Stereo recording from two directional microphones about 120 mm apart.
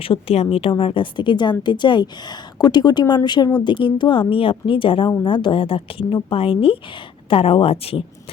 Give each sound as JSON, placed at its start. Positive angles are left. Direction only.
{"t": 0.0, "sound": "a woman's voice", "side_deg": 50}